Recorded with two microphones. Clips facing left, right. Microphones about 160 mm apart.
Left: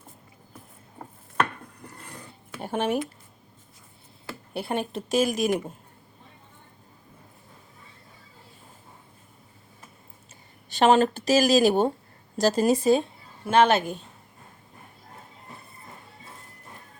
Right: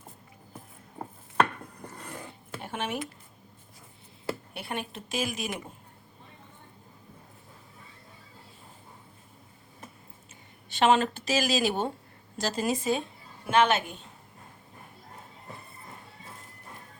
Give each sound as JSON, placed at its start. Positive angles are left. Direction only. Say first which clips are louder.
{"t": 2.6, "sound": "speech", "louder": "left 8 dB", "side_deg": 40}
{"t": 4.5, "sound": "speech", "louder": "left 7 dB", "side_deg": 35}
{"t": 10.7, "sound": "speech", "louder": "left 4 dB", "side_deg": 40}